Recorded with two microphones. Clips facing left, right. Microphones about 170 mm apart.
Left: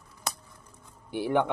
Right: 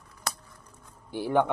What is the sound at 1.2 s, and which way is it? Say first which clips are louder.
Speech: right 1 dB; 65° left (ahead or behind).